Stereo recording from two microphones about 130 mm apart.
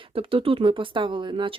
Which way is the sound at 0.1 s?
45° right (ahead or behind).